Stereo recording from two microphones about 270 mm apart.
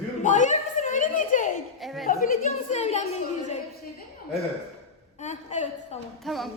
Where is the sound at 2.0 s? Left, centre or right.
Left.